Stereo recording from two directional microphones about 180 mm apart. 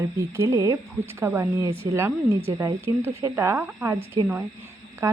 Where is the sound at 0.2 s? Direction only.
15° right (ahead or behind).